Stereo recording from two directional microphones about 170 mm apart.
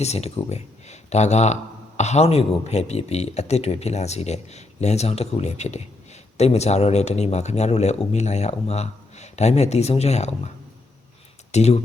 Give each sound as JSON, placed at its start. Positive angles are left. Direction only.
{"t": 0.0, "sound": "a man's voice", "side_deg": 40}
{"t": 11.5, "sound": "a man's voice", "side_deg": 40}